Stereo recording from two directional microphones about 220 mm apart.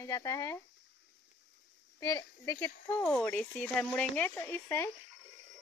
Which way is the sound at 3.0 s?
5° left (ahead or behind).